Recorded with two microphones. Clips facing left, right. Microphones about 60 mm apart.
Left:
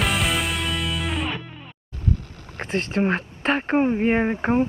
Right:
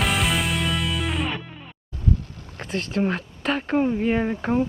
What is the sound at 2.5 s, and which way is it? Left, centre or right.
Speech, left.